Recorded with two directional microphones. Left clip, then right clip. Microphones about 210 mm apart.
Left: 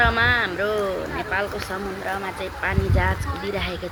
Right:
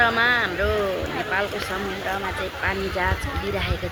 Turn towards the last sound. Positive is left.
turn(degrees=0)  # may be behind; listen again after turning